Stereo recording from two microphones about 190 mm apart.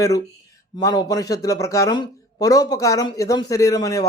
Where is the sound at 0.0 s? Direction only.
15° left (ahead or behind).